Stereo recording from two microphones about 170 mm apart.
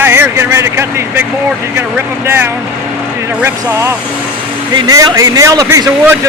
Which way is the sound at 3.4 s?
15° right (ahead or behind).